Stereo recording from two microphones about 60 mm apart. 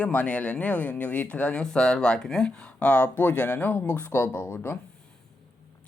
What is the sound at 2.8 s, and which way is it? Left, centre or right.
Speech, left.